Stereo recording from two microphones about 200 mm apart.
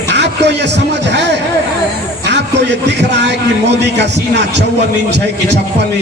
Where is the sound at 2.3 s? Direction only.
60° right (ahead or behind).